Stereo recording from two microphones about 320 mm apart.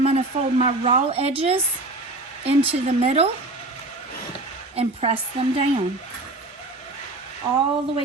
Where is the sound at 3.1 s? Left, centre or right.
Centre.